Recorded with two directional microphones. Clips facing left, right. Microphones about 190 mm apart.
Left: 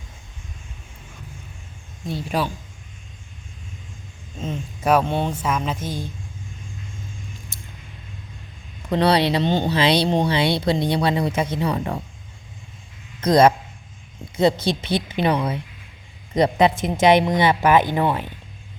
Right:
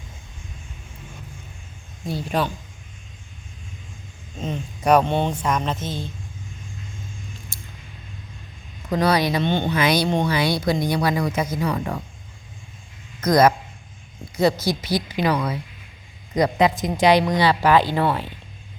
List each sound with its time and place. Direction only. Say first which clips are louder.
2.0 s speech: even; centre (ahead or behind)
4.4 s speech: right 1 dB; 5° left (ahead or behind)
7.5 s a sound: even; 20° left (ahead or behind)
9.0 s speech: left 2 dB; 30° left (ahead or behind)
13.2 s speech: left 1 dB; 30° left (ahead or behind)